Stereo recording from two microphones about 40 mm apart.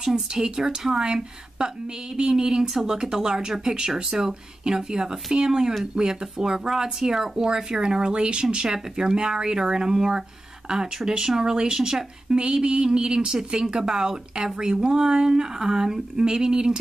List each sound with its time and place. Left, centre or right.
0.0 s speech: centre